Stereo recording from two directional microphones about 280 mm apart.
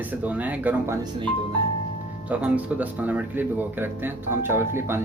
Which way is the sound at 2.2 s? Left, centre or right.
Centre.